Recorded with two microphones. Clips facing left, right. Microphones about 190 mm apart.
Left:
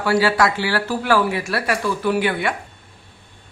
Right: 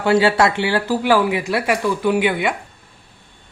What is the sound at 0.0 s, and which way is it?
Speech, 25° right (ahead or behind).